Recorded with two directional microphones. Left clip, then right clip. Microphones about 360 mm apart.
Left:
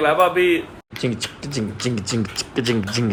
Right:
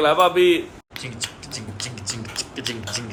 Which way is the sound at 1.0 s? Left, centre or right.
Centre.